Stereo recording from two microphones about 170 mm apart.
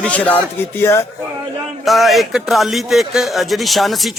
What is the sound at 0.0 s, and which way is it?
A man's voice, 10° left (ahead or behind).